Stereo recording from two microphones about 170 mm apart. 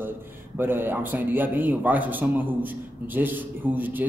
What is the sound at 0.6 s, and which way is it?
A man's voice, 10° right (ahead or behind).